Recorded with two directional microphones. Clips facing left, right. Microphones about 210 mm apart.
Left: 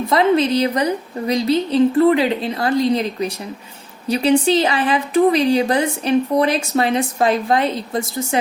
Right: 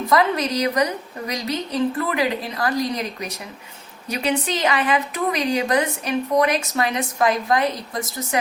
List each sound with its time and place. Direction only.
0.1 s speech: 25° left (ahead or behind)